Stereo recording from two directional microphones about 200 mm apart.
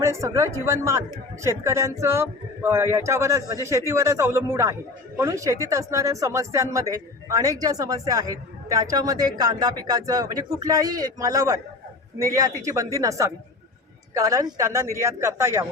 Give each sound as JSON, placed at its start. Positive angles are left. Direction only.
{"t": 0.0, "sound": "speech", "side_deg": -15}